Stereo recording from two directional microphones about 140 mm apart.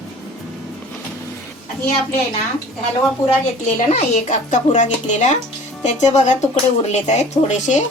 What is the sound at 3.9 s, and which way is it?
Speech, 55° left (ahead or behind).